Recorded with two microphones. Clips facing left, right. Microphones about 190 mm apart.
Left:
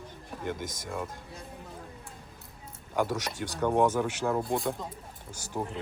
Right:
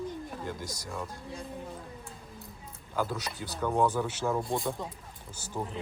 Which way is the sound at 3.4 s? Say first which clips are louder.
Left 3 dB; 90° left.